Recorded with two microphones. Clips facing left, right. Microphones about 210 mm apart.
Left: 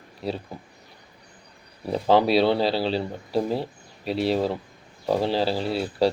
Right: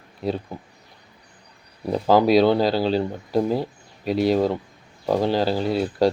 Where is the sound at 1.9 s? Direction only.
Centre (ahead or behind).